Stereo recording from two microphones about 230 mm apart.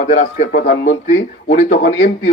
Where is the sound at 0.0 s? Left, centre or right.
Left.